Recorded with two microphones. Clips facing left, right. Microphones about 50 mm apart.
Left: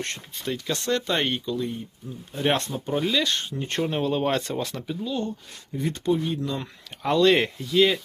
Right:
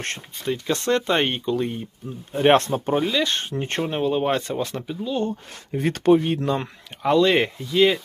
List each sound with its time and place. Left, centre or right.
0.4 s speech: right
1.5 s speech: right
2.3 s speech: right
3.0 s speech: centre
3.2 s speech: right
3.8 s speech: centre
5.1 s speech: right
5.8 s speech: right
7.0 s speech: centre